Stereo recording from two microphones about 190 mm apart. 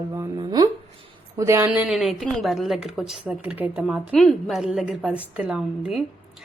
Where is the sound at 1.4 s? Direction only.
15° right (ahead or behind).